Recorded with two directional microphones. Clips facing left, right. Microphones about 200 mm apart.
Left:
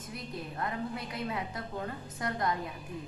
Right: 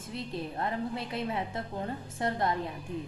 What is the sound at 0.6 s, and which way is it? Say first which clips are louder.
A woman's voice: right 1 dB; 25° right (ahead or behind).